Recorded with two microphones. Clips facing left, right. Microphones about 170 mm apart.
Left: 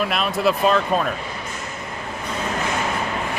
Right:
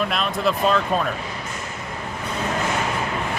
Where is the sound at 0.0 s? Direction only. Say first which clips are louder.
Left 2 dB; 5° left (ahead or behind).